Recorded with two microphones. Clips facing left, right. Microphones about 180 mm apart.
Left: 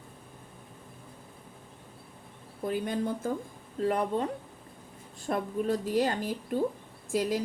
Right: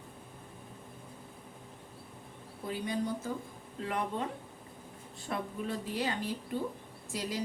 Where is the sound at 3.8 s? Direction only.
40° left (ahead or behind).